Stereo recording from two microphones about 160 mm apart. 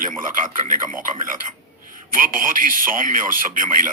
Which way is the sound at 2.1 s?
60° right (ahead or behind).